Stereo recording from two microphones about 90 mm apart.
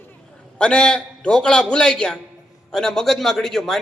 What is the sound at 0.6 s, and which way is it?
A man's voice, 10° left (ahead or behind).